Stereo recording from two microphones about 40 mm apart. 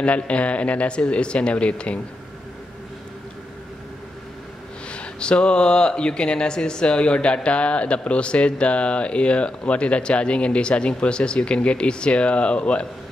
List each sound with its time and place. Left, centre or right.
0.0 s speech: left
4.9 s speech: left